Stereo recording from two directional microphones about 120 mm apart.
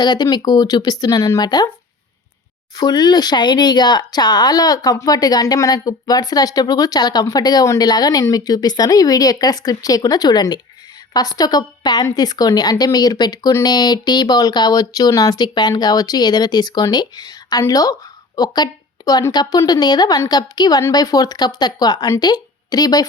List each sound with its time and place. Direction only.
0.0 s speech: 35° left (ahead or behind)
2.7 s a woman's voice: 35° left (ahead or behind)